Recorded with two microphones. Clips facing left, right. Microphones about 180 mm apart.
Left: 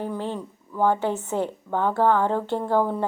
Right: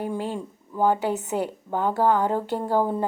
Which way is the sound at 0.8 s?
15° right (ahead or behind).